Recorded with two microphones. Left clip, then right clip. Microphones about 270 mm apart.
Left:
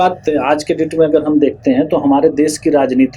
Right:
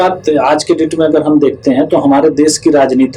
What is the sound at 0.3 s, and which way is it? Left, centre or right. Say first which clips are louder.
Speech: right 4 dB; left.